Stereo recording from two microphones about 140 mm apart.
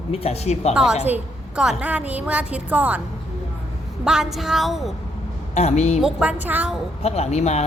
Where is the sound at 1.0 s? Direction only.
10° right (ahead or behind).